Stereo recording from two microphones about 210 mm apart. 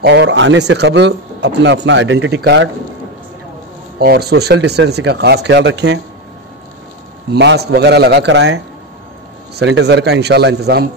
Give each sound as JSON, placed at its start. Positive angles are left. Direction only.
{"t": 0.0, "sound": "speech", "side_deg": -55}
{"t": 4.0, "sound": "speech", "side_deg": -50}
{"t": 7.3, "sound": "speech", "side_deg": -55}
{"t": 9.6, "sound": "speech", "side_deg": -55}